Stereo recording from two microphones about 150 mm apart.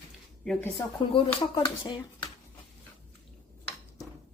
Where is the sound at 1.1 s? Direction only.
30° left (ahead or behind).